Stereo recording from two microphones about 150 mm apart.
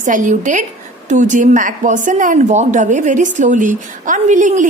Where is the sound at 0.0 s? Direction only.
60° right (ahead or behind).